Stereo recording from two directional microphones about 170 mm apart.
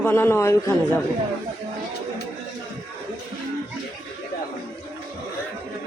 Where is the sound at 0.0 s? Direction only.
10° left (ahead or behind).